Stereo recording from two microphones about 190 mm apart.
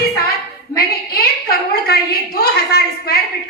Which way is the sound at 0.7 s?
55° left (ahead or behind).